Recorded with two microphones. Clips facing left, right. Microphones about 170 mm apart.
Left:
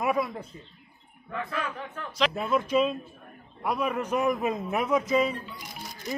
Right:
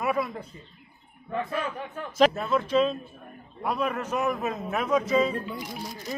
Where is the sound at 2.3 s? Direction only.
10° left (ahead or behind).